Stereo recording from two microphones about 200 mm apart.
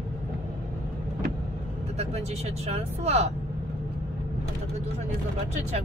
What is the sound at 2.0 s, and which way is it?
Speech, 30° right (ahead or behind).